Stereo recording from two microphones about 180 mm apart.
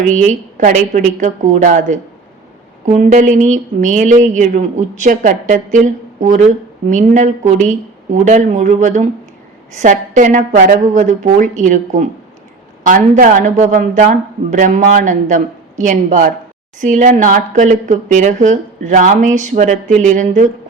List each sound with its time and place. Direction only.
0.1 s speech: 45° right (ahead or behind)